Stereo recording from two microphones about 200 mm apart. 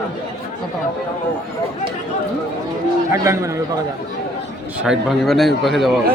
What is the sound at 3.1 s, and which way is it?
Speech, 15° right (ahead or behind).